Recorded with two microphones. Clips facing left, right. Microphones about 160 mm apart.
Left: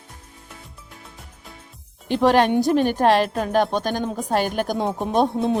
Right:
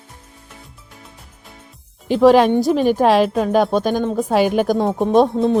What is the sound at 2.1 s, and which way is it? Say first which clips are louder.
A woman's voice: right 5 dB; centre (ahead or behind).